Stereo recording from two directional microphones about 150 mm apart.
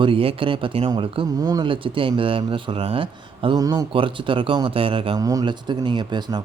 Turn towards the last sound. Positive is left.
turn(degrees=-30)  # may be behind; listen again after turning